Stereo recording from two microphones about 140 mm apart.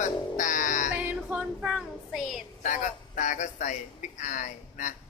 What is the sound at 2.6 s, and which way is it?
A man's voice, 65° left (ahead or behind).